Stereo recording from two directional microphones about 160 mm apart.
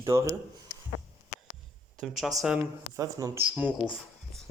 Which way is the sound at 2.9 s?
20° right (ahead or behind).